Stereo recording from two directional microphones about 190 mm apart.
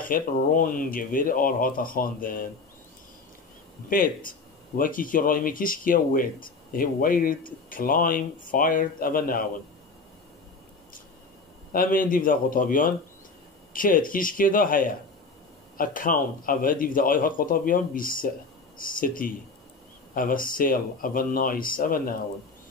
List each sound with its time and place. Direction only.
0.0 s speech: 45° left (ahead or behind)
3.9 s speech: 45° left (ahead or behind)
11.7 s speech: 45° left (ahead or behind)